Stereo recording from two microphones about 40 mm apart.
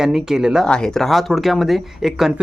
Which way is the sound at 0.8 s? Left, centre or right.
Centre.